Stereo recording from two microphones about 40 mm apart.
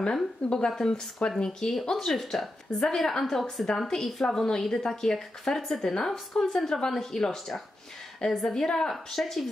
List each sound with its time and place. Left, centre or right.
0.0 s a woman's voice: centre